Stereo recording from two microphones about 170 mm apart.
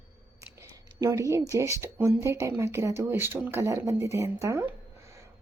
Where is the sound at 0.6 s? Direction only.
15° right (ahead or behind).